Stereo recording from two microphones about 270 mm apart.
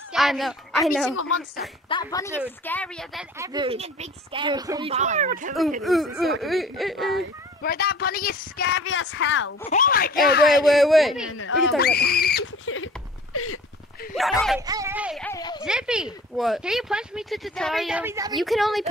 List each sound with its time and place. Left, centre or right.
0.1 s speech: centre
1.9 s speech: centre
3.3 s speech: centre
5.8 s speech: centre
7.6 s a woman's voice: left
9.7 s a woman's voice: left
10.5 s speech: centre
11.2 s speech: left
11.8 s speech: left
14.1 s speech: centre
15.3 s speech: centre
15.6 s speech: centre